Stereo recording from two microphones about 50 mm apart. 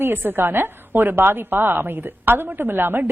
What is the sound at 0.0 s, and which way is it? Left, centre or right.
A woman's voice, right.